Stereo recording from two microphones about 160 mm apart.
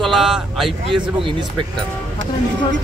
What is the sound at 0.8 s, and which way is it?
Speech, 35° right (ahead or behind).